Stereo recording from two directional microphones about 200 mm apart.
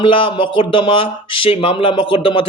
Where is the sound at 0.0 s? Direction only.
25° left (ahead or behind).